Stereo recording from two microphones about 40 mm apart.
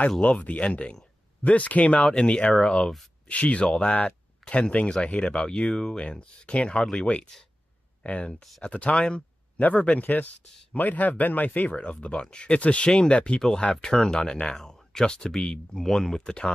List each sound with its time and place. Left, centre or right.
0.2 s speech: left
3.3 s speech: left; by 5.9 s centre
5.9 s speech: left
8.0 s speech: left
11.7 s speech: left
12.1 s speech: centre
12.5 s speech: left
13.1 s speech: left